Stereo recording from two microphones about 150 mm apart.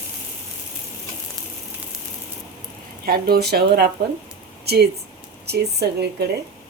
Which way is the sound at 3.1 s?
90° right.